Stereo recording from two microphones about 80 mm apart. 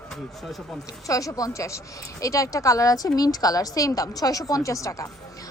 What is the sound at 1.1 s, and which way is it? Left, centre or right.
A woman's voice, left.